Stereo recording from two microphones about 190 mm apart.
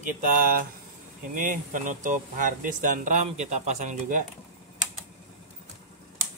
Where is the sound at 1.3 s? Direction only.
45° right (ahead or behind).